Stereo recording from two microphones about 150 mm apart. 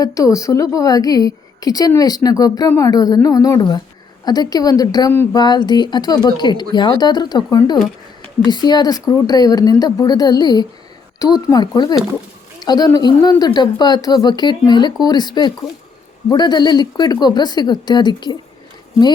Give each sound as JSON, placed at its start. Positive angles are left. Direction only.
{"t": 0.0, "sound": "speech", "side_deg": 20}